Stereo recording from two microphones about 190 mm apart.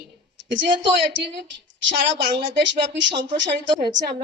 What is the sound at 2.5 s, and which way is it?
Speech, 70° right (ahead or behind).